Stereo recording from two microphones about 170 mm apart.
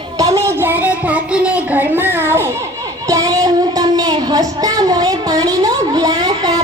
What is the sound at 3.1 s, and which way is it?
Child singing, 20° right (ahead or behind).